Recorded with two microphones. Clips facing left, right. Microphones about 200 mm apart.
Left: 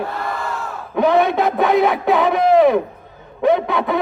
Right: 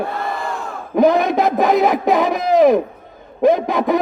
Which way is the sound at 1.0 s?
40° right (ahead or behind).